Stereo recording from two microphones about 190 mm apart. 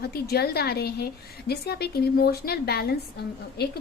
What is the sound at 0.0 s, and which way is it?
A woman's voice, 55° left (ahead or behind).